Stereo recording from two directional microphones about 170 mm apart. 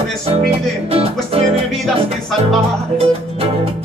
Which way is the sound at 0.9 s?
35° right (ahead or behind).